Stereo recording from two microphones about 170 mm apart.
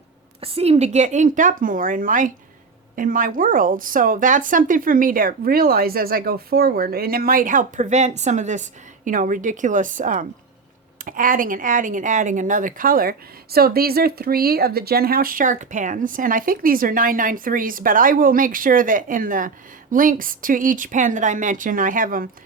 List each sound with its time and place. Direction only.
0.4 s speech: 35° right (ahead or behind); by 22.3 s 55° right (ahead or behind)